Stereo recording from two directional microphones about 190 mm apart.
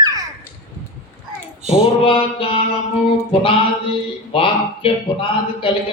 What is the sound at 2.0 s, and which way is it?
Speech, 30° left (ahead or behind).